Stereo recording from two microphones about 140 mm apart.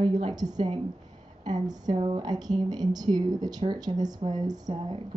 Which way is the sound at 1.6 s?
30° right (ahead or behind).